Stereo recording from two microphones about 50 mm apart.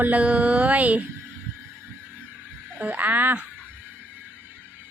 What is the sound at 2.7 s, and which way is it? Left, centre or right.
Speech, right.